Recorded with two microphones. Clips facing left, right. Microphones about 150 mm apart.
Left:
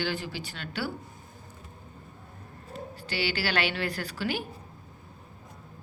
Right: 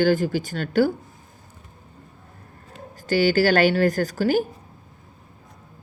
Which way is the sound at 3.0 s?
45° right (ahead or behind).